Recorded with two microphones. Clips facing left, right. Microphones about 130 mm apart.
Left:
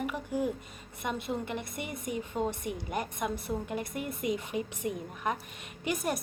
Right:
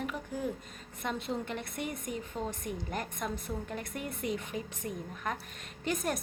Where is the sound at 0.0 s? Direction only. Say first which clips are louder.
Left 4 dB; 5° left (ahead or behind).